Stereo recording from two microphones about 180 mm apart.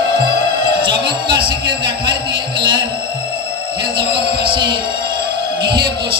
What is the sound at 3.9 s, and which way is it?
Music, 25° right (ahead or behind).